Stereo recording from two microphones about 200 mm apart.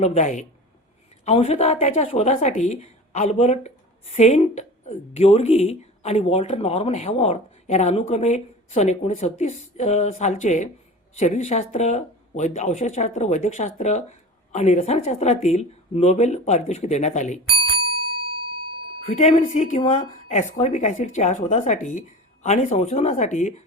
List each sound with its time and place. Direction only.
0.0 s a woman's voice: 35° left (ahead or behind)
19.1 s a woman's voice: 35° left (ahead or behind)